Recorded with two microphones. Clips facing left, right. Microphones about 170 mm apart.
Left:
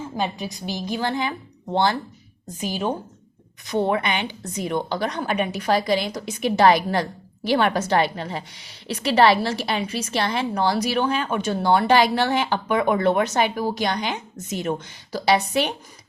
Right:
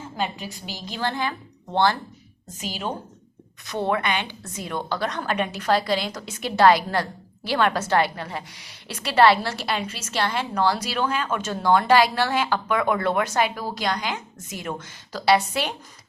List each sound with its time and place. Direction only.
0.5 s a woman's voice: 15° left (ahead or behind)
3.7 s a woman's voice: 15° left (ahead or behind)